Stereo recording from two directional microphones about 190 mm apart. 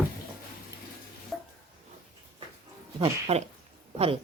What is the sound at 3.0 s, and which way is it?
Speech, 30° right (ahead or behind).